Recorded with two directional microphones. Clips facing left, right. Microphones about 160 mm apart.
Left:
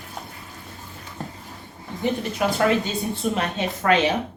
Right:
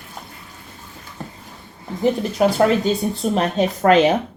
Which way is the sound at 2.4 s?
40° right (ahead or behind).